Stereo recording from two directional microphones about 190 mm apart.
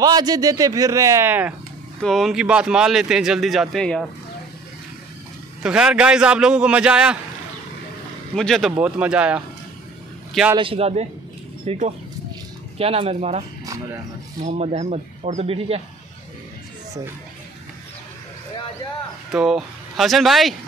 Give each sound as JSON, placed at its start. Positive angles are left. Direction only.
{"t": 0.0, "sound": "speech", "side_deg": -20}
{"t": 2.0, "sound": "speech", "side_deg": 0}
{"t": 5.6, "sound": "speech", "side_deg": -5}
{"t": 8.4, "sound": "speech", "side_deg": 0}
{"t": 10.5, "sound": "speech", "side_deg": -30}
{"t": 14.4, "sound": "speech", "side_deg": -35}
{"t": 19.3, "sound": "speech", "side_deg": 0}